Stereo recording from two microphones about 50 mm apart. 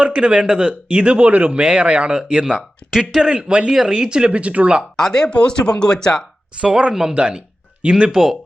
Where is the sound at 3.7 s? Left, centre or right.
Centre.